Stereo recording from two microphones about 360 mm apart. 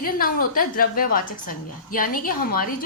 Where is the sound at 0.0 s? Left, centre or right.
Left.